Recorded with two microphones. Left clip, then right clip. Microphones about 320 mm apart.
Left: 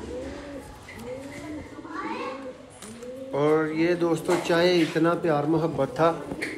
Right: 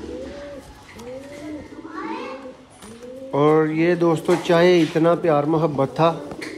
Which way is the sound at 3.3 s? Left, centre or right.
Right.